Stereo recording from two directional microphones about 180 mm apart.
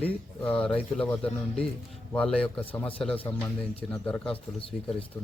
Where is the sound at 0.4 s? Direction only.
5° left (ahead or behind).